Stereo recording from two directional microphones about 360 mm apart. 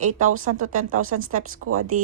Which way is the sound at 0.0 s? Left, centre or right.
Right.